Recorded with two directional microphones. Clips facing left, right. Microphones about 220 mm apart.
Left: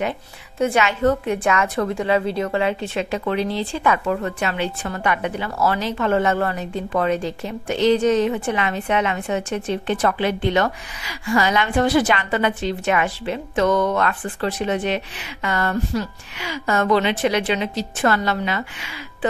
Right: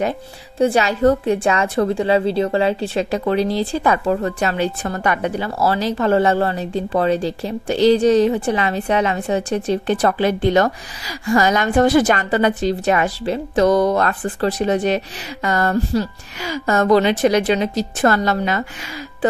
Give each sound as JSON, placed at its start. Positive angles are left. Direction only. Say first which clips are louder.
{"t": 0.6, "sound": "a woman's voice", "louder": "right 3 dB", "side_deg": -35}